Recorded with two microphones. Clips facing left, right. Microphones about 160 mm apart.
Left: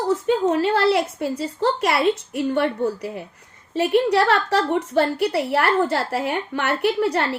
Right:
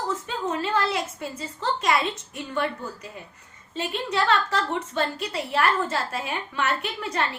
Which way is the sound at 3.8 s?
70° left (ahead or behind).